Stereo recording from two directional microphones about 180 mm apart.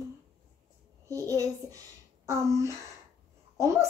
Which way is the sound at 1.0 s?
20° right (ahead or behind).